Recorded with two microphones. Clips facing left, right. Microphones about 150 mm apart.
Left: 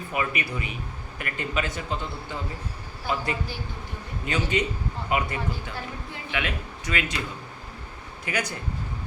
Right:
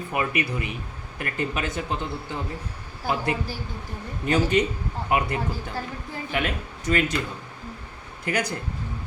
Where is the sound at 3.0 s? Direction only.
50° right (ahead or behind).